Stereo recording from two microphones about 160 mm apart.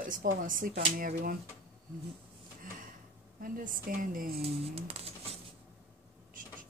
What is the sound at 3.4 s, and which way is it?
Speech, 60° right (ahead or behind).